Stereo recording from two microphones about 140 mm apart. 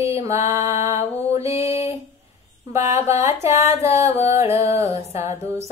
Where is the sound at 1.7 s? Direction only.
50° left (ahead or behind).